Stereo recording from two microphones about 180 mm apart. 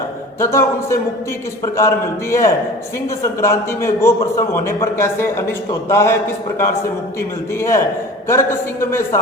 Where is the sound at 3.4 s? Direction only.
15° left (ahead or behind).